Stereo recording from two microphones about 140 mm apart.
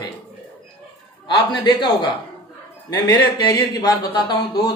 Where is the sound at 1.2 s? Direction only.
35° left (ahead or behind).